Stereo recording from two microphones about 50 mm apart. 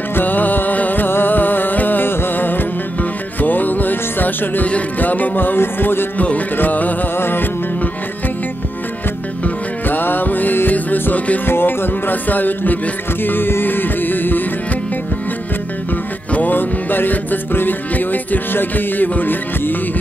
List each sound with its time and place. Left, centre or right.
0.1 s music: left
4.6 s music: left
7.2 s music: left
9.4 s music: left
11.4 s music: left
16.3 s music: left